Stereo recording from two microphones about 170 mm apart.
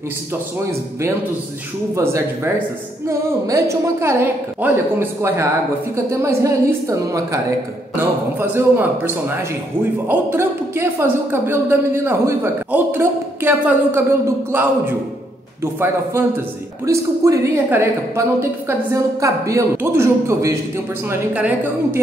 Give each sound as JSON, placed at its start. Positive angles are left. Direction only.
{"t": 2.0, "sound": "speech", "side_deg": -15}